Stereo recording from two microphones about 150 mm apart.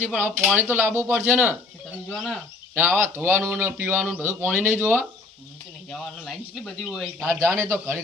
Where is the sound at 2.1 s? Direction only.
5° left (ahead or behind).